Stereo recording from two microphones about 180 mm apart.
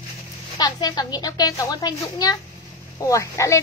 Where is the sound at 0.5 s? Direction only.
20° left (ahead or behind).